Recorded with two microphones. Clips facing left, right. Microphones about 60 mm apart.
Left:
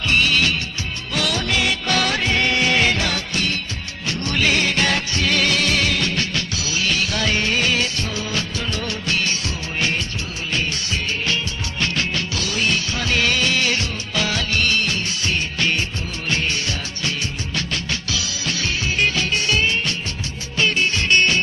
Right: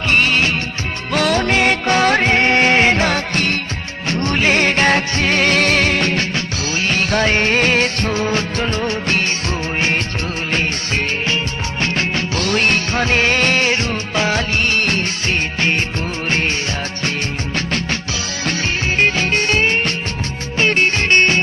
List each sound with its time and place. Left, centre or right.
0.1 s music: right
1.9 s music: right
10.5 s music: right
11.8 s music: right
12.4 s music: right
14.8 s music: right
17.5 s music: right